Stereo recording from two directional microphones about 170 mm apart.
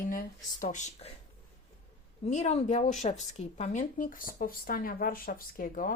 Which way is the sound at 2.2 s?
40° left (ahead or behind).